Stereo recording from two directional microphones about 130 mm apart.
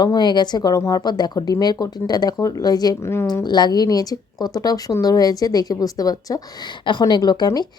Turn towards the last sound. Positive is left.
turn(degrees=30)  # may be behind; listen again after turning